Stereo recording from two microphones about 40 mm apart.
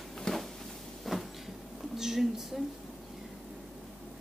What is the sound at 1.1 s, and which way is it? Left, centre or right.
Cupboard open or close, centre.